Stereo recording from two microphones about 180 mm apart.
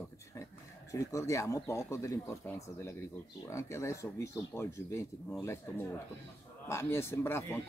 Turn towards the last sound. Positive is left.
turn(degrees=15)  # may be behind; listen again after turning